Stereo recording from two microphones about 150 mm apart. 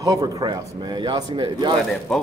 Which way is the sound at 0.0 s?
20° right (ahead or behind).